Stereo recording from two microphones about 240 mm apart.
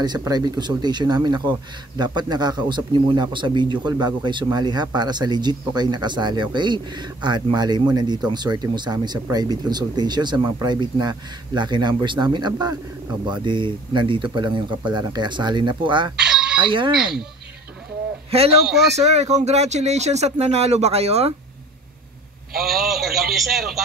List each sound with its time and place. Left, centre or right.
0.0 s a man's voice: centre
16.2 s fowl: centre
16.9 s a man's voice: centre
18.3 s speech: right
22.6 s a man's voice: centre